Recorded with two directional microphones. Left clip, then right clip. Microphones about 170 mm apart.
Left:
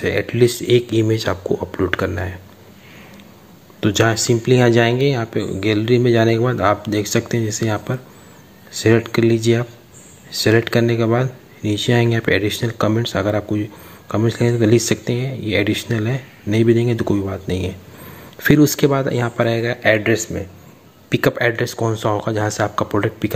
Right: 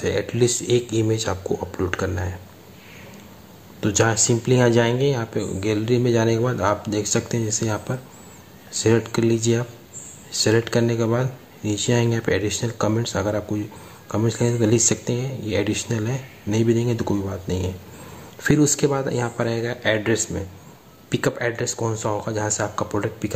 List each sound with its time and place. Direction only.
0.0 s speech: 15° left (ahead or behind)
3.8 s speech: 15° left (ahead or behind)